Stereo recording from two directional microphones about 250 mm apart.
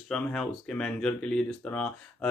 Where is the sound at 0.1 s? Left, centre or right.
Centre.